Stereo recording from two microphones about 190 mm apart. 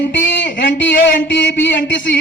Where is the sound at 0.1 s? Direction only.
75° left (ahead or behind).